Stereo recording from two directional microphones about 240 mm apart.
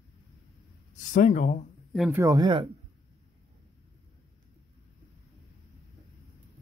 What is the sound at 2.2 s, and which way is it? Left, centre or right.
Speech, centre.